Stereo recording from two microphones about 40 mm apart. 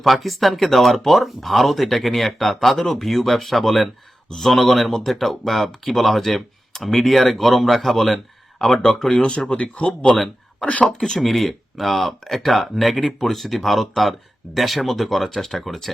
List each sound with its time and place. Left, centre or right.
0.0 s speech: centre
8.9 s speech: centre
9.5 s speech: left
9.8 s speech: centre